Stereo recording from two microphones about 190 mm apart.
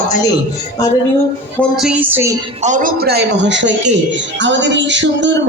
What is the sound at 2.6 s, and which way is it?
A man's voice, 45° right (ahead or behind).